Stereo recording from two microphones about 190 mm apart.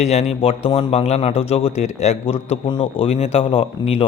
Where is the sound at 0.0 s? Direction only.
35° left (ahead or behind).